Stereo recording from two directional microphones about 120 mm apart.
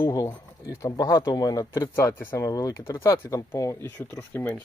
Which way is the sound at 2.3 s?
30° left (ahead or behind).